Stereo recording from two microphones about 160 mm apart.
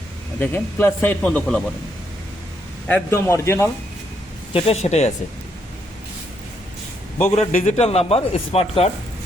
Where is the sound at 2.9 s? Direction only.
10° left (ahead or behind).